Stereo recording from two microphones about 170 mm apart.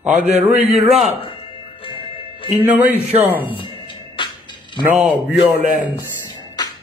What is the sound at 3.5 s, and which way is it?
Music, 30° left (ahead or behind).